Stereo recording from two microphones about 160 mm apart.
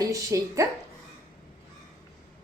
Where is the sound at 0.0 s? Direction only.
20° right (ahead or behind).